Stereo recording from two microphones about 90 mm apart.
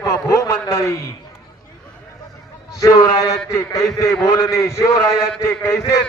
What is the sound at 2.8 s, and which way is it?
A man's voice, 45° left (ahead or behind).